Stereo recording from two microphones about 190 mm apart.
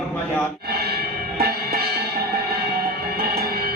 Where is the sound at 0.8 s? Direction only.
55° right (ahead or behind).